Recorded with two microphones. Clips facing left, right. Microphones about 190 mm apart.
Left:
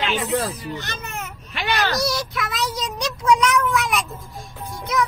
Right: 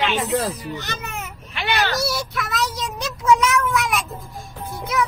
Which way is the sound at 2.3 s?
Centre (ahead or behind).